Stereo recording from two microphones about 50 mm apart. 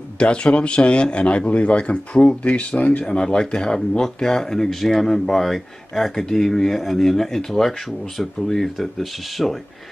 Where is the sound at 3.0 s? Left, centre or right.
Centre.